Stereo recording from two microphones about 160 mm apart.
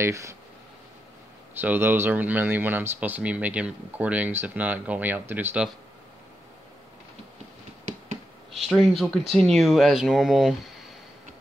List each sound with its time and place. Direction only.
0.0 s speech: 20° right (ahead or behind)
1.6 s speech: 10° right (ahead or behind)
8.5 s speech: centre (ahead or behind)